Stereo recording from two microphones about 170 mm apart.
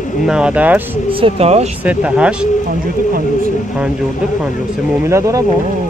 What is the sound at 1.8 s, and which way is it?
Speech, 5° right (ahead or behind).